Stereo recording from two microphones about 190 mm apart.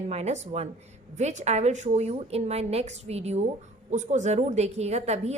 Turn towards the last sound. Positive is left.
turn(degrees=-35)  # may be behind; listen again after turning